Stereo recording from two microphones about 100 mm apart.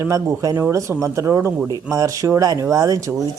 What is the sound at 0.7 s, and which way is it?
Speech, 30° right (ahead or behind).